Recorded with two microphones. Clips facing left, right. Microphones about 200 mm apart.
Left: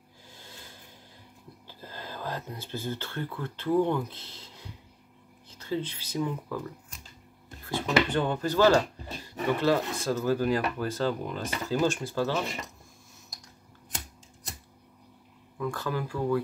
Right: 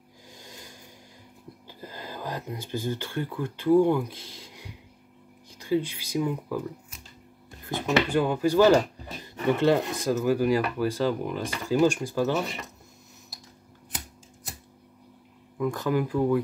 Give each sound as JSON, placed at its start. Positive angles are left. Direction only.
{"t": 0.3, "sound": "a sound", "side_deg": -15}
{"t": 1.7, "sound": "speech", "side_deg": -15}
{"t": 15.5, "sound": "speech", "side_deg": -15}